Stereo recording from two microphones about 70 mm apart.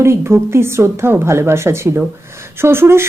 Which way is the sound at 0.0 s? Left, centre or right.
Right.